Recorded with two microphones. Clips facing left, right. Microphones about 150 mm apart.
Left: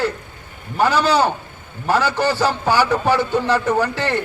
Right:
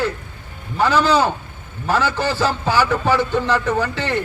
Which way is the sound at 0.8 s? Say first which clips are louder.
Even; 15° left (ahead or behind).